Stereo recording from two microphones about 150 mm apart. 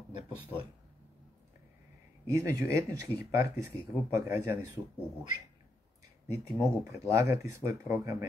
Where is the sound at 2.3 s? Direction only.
20° right (ahead or behind).